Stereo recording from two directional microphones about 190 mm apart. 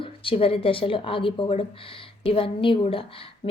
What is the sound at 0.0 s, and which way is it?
A woman's voice, 30° left (ahead or behind).